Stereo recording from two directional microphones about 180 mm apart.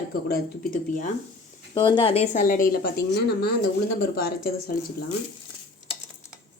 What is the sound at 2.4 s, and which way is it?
A woman's voice, 50° left (ahead or behind).